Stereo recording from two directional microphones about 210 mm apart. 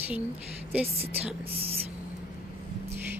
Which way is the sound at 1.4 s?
25° right (ahead or behind).